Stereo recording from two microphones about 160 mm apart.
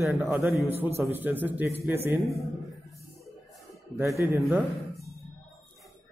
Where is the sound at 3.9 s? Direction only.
15° right (ahead or behind).